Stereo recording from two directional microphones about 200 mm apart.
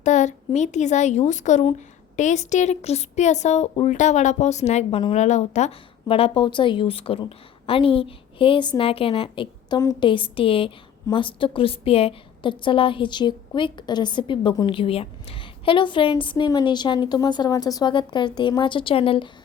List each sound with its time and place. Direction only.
0.0 s a woman's voice: 35° left (ahead or behind)